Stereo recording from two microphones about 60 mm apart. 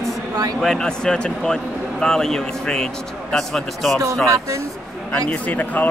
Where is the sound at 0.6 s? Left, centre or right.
Centre.